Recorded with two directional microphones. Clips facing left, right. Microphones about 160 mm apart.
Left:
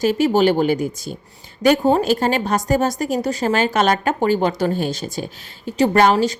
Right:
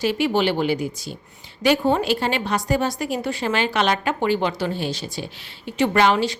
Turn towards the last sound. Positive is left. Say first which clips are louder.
# left 3 dB
turn(degrees=45)  # may be behind; listen again after turning